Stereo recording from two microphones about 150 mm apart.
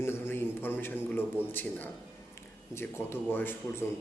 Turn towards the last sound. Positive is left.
turn(degrees=15)  # may be behind; listen again after turning